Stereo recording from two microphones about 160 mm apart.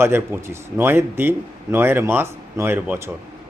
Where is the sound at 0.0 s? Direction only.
15° right (ahead or behind).